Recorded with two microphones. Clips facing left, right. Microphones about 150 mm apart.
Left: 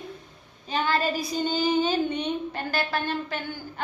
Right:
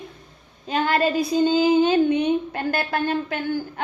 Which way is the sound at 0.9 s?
60° right (ahead or behind).